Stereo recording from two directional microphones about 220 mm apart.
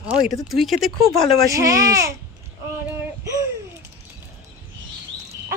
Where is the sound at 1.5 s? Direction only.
15° right (ahead or behind).